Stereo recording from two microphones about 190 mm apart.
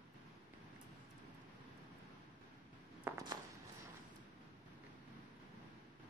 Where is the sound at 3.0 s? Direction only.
20° right (ahead or behind).